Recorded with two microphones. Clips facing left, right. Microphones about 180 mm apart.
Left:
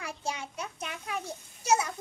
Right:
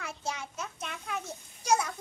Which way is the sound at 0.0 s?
10° left (ahead or behind).